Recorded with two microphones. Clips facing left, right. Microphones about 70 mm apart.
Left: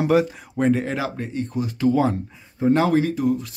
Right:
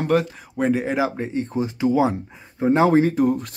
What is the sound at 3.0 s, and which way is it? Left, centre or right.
Speech, right.